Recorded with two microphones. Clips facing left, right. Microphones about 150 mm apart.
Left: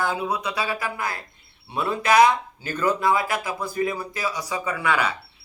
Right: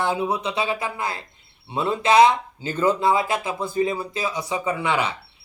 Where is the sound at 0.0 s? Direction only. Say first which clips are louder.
Right 2 dB; 25° right (ahead or behind).